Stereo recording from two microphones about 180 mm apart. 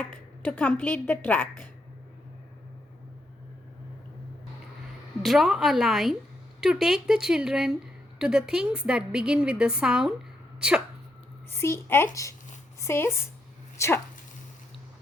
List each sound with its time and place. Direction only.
0.4 s a woman's voice: 10° left (ahead or behind)
5.2 s a woman's voice: centre (ahead or behind)
11.5 s a woman's voice: 15° left (ahead or behind)